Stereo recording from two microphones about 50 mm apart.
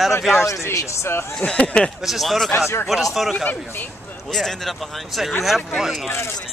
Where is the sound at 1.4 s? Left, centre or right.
Left.